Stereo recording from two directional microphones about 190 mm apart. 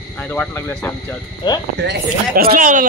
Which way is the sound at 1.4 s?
25° left (ahead or behind).